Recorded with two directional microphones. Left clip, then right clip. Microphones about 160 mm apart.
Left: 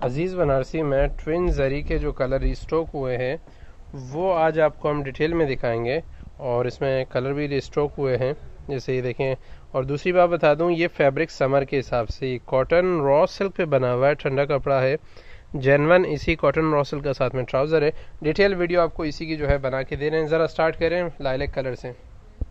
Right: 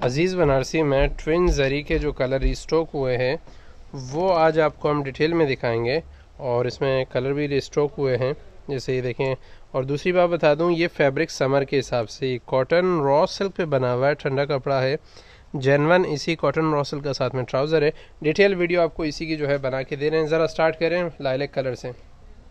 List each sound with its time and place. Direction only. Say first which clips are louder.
0.0 s speech: right 3 dB; 45° right (ahead or behind); by 21.9 s 30° right (ahead or behind)